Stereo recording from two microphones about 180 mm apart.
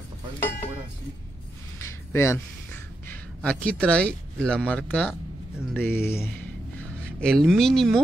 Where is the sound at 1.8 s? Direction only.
15° left (ahead or behind).